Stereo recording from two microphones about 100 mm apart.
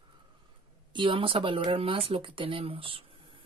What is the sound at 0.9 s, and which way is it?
Speech, 55° right (ahead or behind).